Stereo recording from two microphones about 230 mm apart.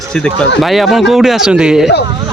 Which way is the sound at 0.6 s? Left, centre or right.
Centre.